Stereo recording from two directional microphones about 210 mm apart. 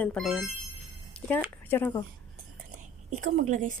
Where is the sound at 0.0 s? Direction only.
5° left (ahead or behind).